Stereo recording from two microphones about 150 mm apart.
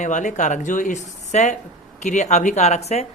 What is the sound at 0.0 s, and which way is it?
Speech, 55° left (ahead or behind).